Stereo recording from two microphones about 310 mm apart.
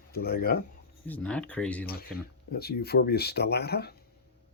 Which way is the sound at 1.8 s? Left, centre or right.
Left.